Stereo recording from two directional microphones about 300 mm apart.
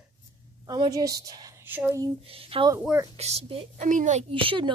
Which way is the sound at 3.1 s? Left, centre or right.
Right.